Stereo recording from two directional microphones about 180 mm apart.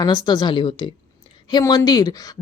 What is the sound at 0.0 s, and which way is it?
Speech, 25° left (ahead or behind).